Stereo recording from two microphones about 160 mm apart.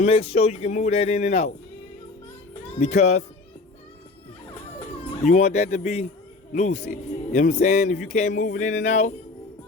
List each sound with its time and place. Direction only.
0.0 s speech: 40° left (ahead or behind)
2.7 s speech: 45° left (ahead or behind)
5.2 s speech: 45° left (ahead or behind)